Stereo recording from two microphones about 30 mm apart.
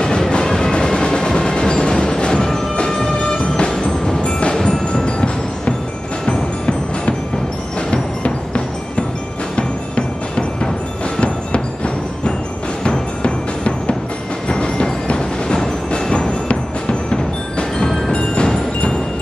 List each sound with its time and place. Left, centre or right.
0.0 s train: left
0.7 s music: left
4.2 s music: left
7.9 s a sound: left
9.6 s music: left